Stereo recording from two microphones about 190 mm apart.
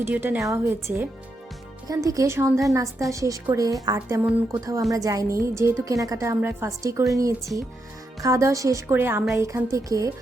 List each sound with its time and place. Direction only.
0.0 s a woman's voice: 10° right (ahead or behind)